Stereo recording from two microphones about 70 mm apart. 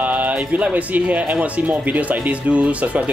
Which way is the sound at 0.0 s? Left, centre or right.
Right.